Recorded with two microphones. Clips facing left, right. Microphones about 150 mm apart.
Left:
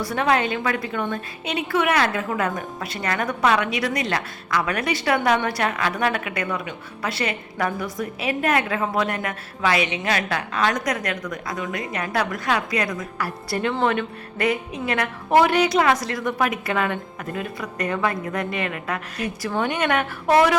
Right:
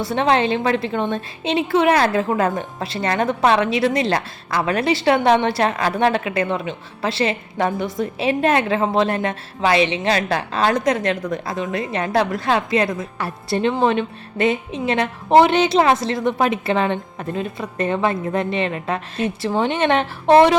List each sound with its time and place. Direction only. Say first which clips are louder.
0.0 s a woman's voice: right 3 dB; 25° right (ahead or behind)